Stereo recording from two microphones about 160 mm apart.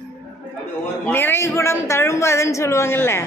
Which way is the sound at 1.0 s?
15° left (ahead or behind).